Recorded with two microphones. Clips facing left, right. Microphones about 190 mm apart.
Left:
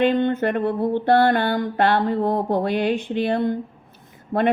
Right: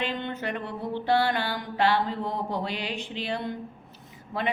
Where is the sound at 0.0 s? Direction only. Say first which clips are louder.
Left 12 dB; 55° left (ahead or behind).